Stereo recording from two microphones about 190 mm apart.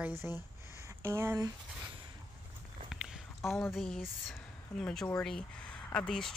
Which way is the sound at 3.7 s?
Centre (ahead or behind).